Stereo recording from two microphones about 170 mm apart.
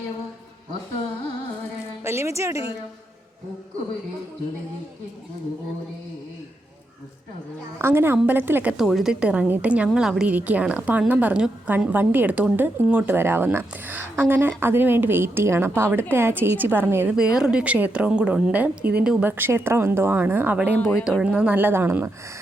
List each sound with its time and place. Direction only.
2.0 s a woman's voice: 15° right (ahead or behind)
7.8 s a woman's voice: 15° right (ahead or behind)
8.8 s a woman's voice: centre (ahead or behind)